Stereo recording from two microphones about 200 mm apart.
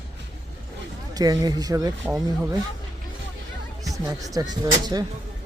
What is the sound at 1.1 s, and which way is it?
Speech, 20° right (ahead or behind).